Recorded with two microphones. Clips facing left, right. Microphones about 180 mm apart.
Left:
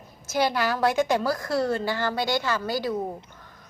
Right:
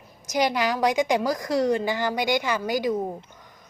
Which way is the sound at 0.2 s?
15° right (ahead or behind).